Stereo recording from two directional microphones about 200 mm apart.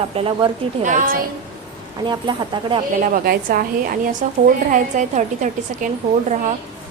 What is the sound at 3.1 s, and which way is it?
A woman's voice, 45° right (ahead or behind).